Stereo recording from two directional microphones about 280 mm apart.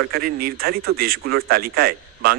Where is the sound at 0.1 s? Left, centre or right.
Right.